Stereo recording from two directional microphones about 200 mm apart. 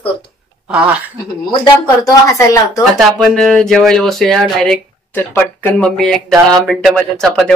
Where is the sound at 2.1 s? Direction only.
15° left (ahead or behind).